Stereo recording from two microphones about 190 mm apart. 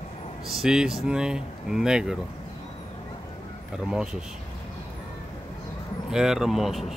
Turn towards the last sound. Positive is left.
turn(degrees=0)  # may be behind; listen again after turning